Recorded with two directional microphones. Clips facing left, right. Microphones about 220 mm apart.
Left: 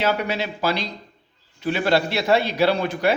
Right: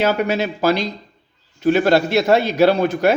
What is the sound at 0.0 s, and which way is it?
A man's voice, 45° right (ahead or behind).